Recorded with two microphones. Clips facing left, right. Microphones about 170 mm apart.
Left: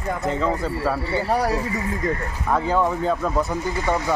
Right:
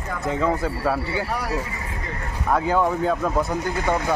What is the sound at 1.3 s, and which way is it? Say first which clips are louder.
Speech: left 6 dB; 35° left (ahead or behind).